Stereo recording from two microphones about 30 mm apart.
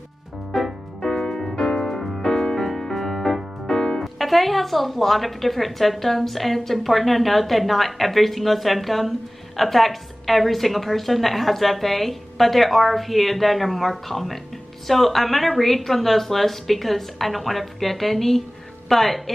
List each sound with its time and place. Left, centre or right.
1.0 s music: centre
3.6 s music: centre
4.0 s a woman's voice: centre